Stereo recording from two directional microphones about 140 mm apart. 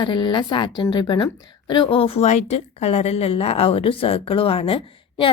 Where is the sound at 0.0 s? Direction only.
35° left (ahead or behind).